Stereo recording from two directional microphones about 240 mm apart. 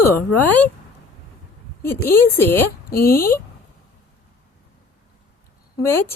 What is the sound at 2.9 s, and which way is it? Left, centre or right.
Speech, left.